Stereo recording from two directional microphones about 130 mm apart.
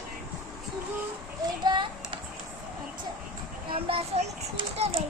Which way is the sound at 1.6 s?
35° right (ahead or behind).